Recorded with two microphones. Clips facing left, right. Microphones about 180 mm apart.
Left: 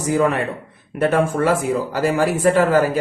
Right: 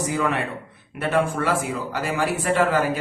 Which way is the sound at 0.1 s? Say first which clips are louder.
Left 11 dB; 45° left (ahead or behind).